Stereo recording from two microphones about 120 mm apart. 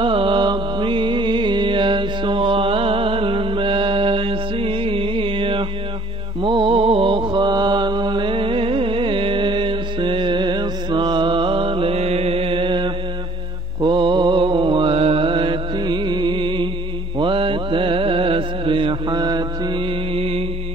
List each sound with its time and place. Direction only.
0.0 s music: 50° right (ahead or behind)
6.4 s mantra: 45° right (ahead or behind)
20.2 s music: 55° right (ahead or behind)